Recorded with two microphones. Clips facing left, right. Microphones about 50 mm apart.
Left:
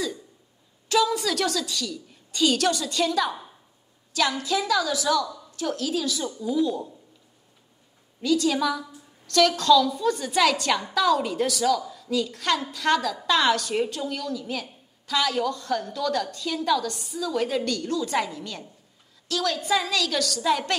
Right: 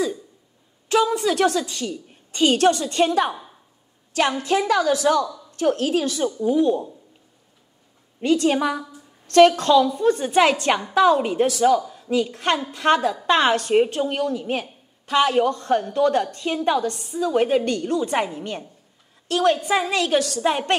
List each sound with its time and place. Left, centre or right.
0.8 s a woman's voice: right
8.2 s a woman's voice: right